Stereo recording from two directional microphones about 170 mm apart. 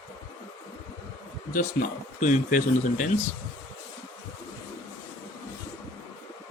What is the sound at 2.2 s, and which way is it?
Speech, 50° left (ahead or behind).